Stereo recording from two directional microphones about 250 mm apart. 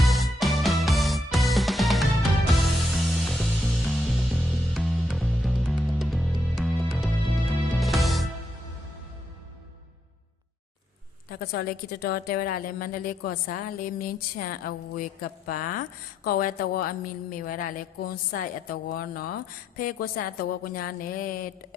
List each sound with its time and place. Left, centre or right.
0.0 s music: centre
11.3 s a woman's voice: left